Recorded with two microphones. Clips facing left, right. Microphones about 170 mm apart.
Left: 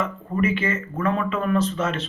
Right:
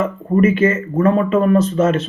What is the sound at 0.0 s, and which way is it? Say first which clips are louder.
Speech: right 9 dB; 45° right (ahead or behind).